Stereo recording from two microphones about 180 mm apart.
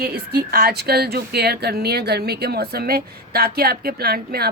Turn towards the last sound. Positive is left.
turn(degrees=-60)  # may be behind; listen again after turning